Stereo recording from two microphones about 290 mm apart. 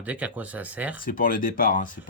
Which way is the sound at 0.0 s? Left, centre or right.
Centre.